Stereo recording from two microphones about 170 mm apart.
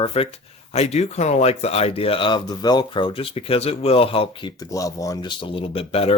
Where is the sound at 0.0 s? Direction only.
35° left (ahead or behind).